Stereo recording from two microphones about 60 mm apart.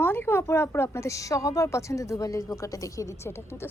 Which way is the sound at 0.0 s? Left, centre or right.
Left.